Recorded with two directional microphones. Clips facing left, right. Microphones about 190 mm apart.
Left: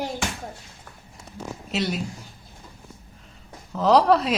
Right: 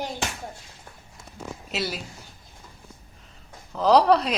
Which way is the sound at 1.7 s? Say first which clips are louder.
Left 4 dB; centre (ahead or behind).